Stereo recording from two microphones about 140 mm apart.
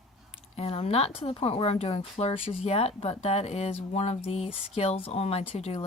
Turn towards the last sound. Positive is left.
turn(degrees=45)  # may be behind; listen again after turning